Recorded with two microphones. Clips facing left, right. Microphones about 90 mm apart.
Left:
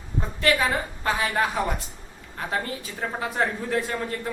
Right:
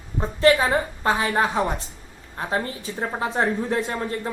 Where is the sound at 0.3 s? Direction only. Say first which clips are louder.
Right 5 dB; 25° right (ahead or behind).